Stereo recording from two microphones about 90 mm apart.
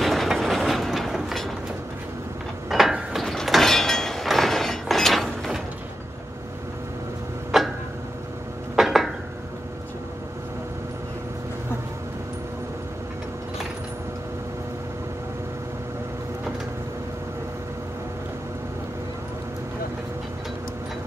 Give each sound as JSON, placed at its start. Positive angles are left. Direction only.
{"t": 0.0, "sound": "train", "side_deg": 0}
{"t": 2.7, "sound": "a sound", "side_deg": -5}
{"t": 7.5, "sound": "tick-tock", "side_deg": 0}
{"t": 8.7, "sound": "dishes", "side_deg": 0}